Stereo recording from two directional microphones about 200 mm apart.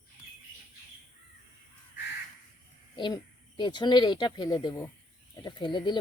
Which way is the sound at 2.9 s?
20° left (ahead or behind).